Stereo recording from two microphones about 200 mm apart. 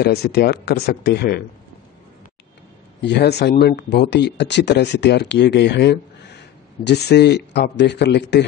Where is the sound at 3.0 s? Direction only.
55° left (ahead or behind).